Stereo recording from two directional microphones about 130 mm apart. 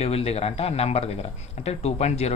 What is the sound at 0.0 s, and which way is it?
Speech, 50° left (ahead or behind).